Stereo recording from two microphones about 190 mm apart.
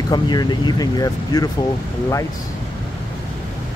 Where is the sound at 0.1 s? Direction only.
20° left (ahead or behind).